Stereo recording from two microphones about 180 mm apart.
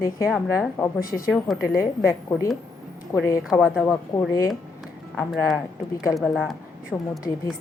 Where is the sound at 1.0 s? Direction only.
50° left (ahead or behind).